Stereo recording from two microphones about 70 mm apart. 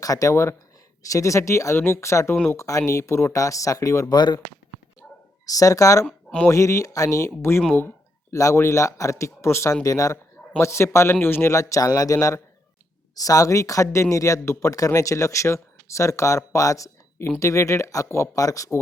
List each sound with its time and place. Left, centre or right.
0.0 s a man's voice: left
4.1 s speech: left
5.0 s a sound: centre
5.5 s speech: left
7.3 s a man's voice: left
8.3 s speech: left
9.8 s speech: left
10.6 s a man's voice: left
11.5 s speech: left